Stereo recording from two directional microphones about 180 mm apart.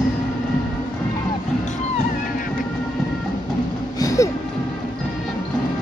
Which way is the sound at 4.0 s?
20° left (ahead or behind).